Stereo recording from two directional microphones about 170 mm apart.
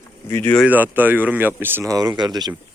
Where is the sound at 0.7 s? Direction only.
10° right (ahead or behind).